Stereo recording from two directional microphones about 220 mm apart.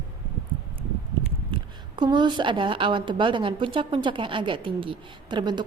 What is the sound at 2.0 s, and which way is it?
A woman's voice, 20° right (ahead or behind).